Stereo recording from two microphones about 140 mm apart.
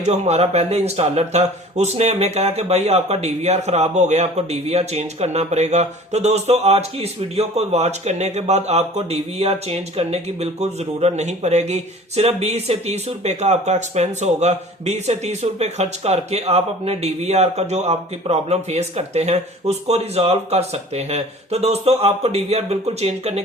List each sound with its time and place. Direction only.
0.0 s speech: 50° right (ahead or behind)